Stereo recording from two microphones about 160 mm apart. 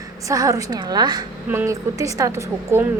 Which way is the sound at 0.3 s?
20° right (ahead or behind).